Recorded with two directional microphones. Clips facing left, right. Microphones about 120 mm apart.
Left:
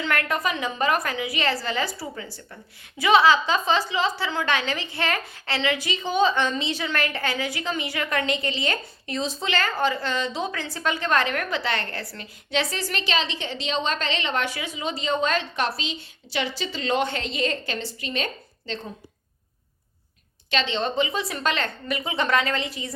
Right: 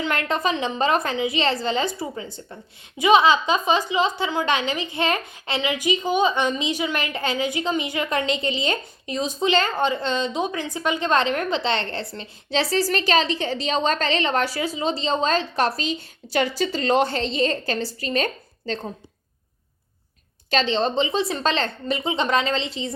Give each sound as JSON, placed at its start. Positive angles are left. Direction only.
{"t": 0.0, "sound": "a woman's voice", "side_deg": -20}
{"t": 20.5, "sound": "a woman's voice", "side_deg": -40}